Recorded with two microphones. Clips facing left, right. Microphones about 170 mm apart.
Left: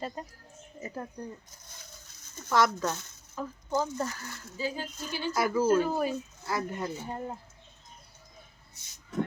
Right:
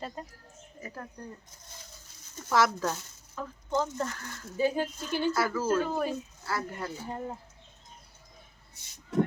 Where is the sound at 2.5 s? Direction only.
Centre (ahead or behind).